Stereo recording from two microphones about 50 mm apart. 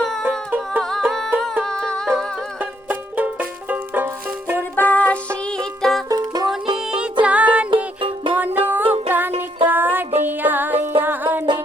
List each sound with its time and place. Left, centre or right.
0.0 s music: centre
2.6 s banjo: right
4.0 s music: right
4.8 s music: left
5.5 s music: centre
6.5 s music: centre
8.4 s music: right